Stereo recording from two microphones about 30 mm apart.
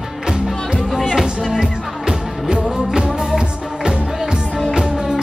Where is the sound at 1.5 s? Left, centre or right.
Right.